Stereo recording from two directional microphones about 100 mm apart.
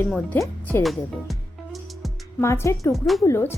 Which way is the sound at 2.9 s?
Centre (ahead or behind).